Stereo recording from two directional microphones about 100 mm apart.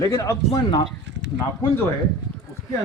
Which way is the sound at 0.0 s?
35° left (ahead or behind).